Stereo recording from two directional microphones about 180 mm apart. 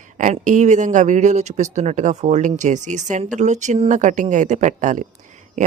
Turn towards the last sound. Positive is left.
turn(degrees=-45)  # may be behind; listen again after turning